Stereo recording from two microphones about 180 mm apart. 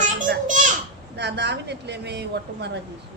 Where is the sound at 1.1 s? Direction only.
70° right (ahead or behind).